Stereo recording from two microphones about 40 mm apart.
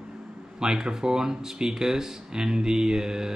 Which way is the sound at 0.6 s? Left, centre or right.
Centre.